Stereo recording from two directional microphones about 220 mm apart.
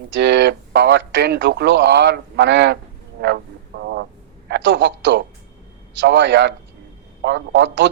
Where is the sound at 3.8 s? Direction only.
50° right (ahead or behind).